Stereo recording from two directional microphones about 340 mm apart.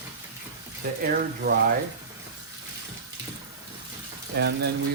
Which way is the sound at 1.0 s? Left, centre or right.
Right.